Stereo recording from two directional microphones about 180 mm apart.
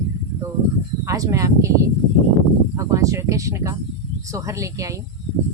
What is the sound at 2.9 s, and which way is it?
A woman's voice, 20° right (ahead or behind).